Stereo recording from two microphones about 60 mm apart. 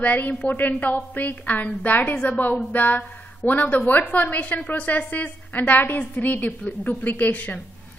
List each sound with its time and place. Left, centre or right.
0.0 s a woman's voice: left